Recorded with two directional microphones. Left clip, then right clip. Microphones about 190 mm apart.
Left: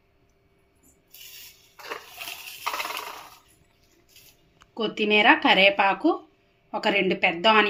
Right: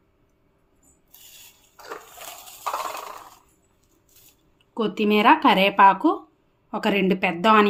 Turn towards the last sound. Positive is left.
turn(degrees=-55)  # may be behind; listen again after turning